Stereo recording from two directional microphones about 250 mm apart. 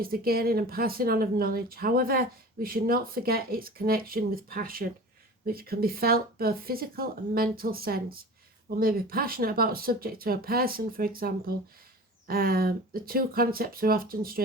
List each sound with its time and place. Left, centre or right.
0.0 s speech: right